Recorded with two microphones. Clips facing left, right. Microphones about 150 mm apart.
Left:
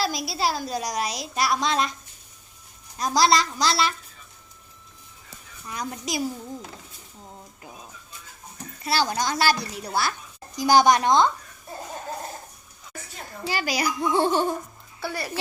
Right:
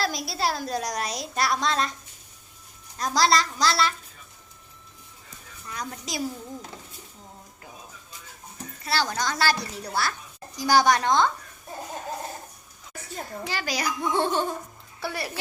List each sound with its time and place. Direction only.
0.0 s speech: 5° left (ahead or behind)
3.0 s a woman's voice: 15° left (ahead or behind)
5.6 s a woman's voice: 15° left (ahead or behind)
8.8 s a woman's voice: 15° left (ahead or behind)
13.5 s a woman's voice: 10° left (ahead or behind)
15.0 s speech: 5° right (ahead or behind)